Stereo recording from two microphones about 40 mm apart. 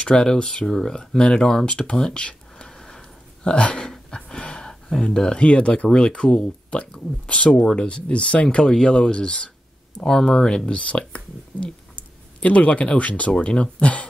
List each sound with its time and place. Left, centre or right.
0.0 s speech: centre
2.7 s a sound: centre
3.9 s gasp: centre
5.9 s speech: left
13.3 s speech: left